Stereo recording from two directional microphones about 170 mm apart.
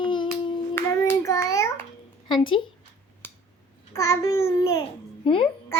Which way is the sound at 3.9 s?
20° left (ahead or behind).